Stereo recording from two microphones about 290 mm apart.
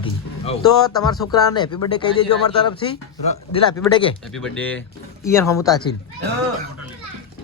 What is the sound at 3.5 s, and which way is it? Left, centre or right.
Speech, centre.